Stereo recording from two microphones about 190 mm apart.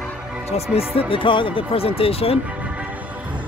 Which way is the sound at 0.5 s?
35° left (ahead or behind).